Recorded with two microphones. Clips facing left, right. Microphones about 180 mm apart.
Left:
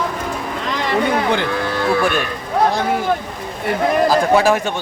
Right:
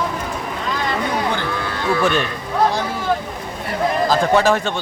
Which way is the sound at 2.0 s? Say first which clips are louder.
Even; 10° left (ahead or behind).